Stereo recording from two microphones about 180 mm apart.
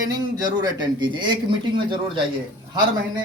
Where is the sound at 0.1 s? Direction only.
20° right (ahead or behind).